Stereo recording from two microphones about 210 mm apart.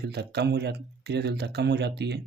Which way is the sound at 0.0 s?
50° right (ahead or behind).